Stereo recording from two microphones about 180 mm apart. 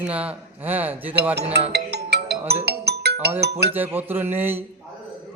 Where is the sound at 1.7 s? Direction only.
65° right (ahead or behind).